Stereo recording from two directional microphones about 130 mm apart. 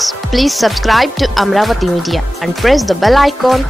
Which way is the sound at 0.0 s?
Centre (ahead or behind).